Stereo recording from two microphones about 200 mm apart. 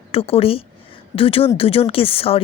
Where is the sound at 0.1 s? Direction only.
30° left (ahead or behind).